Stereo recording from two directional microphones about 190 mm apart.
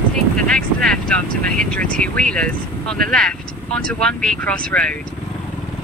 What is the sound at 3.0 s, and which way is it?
Speech, 5° left (ahead or behind).